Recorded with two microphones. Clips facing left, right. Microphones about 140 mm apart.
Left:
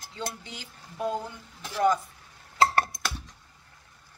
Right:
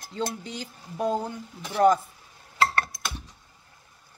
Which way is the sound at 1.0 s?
40° right (ahead or behind).